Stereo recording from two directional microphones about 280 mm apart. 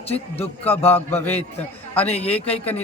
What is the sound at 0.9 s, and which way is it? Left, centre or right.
Speech, centre.